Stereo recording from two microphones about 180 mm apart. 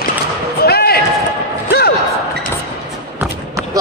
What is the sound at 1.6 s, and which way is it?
Slam, 60° left (ahead or behind).